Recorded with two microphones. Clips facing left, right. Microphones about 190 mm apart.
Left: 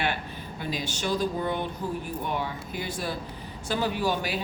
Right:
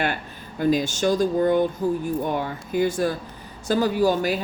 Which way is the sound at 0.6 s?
45° right (ahead or behind).